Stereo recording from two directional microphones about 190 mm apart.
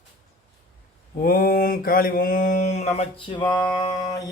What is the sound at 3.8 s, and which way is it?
Mantra, 20° left (ahead or behind).